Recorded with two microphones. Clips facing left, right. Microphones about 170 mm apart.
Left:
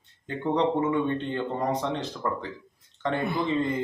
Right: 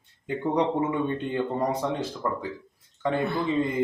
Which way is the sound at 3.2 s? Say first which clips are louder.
Right 1 dB; 15° left (ahead or behind).